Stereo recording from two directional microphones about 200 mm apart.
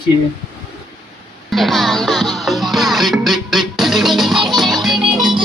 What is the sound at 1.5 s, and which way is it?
Music, centre (ahead or behind).